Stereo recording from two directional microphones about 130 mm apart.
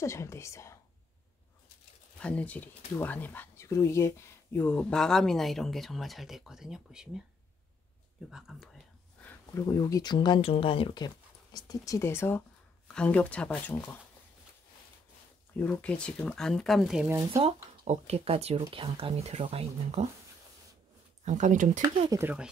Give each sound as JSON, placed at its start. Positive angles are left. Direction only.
{"t": 0.0, "sound": "speech", "side_deg": 20}
{"t": 2.1, "sound": "speech", "side_deg": 10}
{"t": 8.3, "sound": "speech", "side_deg": -5}
{"t": 9.5, "sound": "speech", "side_deg": 25}
{"t": 11.1, "sound": "speech", "side_deg": 30}
{"t": 15.5, "sound": "speech", "side_deg": 10}
{"t": 17.8, "sound": "speech", "side_deg": -55}
{"t": 21.3, "sound": "speech", "side_deg": -70}
{"t": 22.1, "sound": "speech", "side_deg": -25}